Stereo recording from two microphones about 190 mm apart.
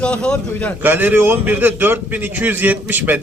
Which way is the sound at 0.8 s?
10° right (ahead or behind).